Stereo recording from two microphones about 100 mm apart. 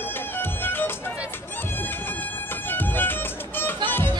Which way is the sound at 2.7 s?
20° left (ahead or behind).